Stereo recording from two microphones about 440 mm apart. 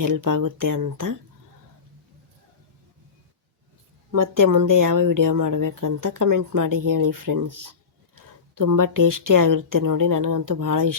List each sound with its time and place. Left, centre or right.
0.0 s speech: right
4.1 s speech: right